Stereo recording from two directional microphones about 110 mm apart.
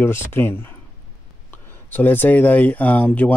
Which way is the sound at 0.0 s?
25° left (ahead or behind).